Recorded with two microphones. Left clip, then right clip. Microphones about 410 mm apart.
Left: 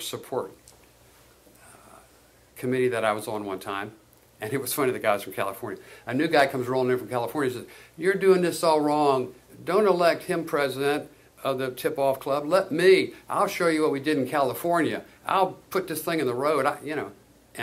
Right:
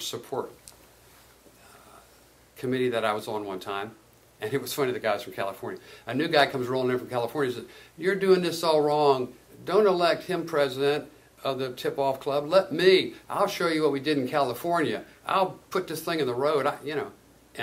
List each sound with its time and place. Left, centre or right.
0.0 s speech: left
2.5 s speech: left